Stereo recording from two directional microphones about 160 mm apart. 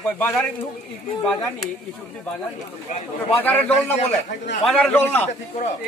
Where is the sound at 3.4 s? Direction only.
10° left (ahead or behind).